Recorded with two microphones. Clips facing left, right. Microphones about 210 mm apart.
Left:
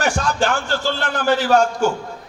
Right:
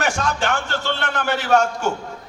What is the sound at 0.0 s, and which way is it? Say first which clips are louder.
A man's voice: left 2 dB; 35° left (ahead or behind).